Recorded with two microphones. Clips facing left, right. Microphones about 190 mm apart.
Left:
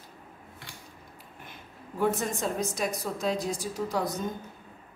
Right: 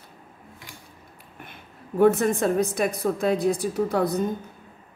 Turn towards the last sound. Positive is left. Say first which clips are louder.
# right 7 dB
turn(degrees=-60)  # may be behind; listen again after turning